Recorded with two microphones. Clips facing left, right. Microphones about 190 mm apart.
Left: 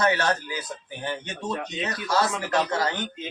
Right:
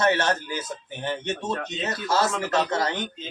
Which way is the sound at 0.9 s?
20° right (ahead or behind).